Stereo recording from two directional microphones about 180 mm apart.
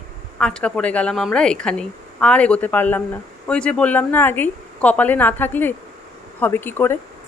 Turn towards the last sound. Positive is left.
turn(degrees=10)  # may be behind; listen again after turning